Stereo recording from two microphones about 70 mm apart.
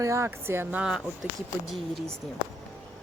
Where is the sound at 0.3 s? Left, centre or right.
Right.